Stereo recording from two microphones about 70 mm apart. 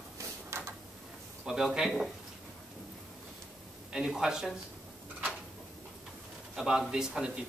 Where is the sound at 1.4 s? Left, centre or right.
Centre.